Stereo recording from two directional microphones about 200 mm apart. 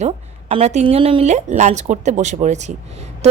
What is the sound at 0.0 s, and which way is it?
A woman's voice, 30° right (ahead or behind).